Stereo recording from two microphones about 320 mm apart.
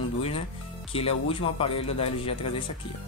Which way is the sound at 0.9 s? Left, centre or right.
Centre.